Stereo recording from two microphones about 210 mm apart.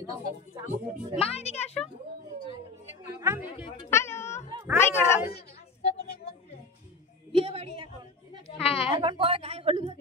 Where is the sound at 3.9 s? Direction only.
10° left (ahead or behind).